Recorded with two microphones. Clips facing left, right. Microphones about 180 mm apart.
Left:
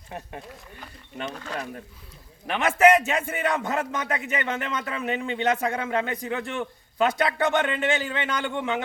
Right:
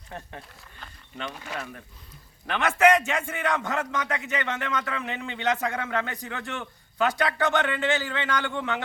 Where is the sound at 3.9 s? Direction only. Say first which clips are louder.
Left 1 dB; 25° left (ahead or behind).